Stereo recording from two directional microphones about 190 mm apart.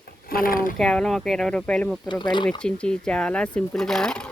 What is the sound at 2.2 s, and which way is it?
Speech, 25° left (ahead or behind).